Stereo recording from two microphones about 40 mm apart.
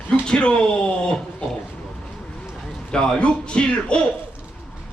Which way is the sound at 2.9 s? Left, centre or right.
Left.